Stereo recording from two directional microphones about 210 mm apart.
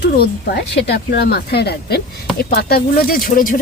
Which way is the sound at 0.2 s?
50° left (ahead or behind).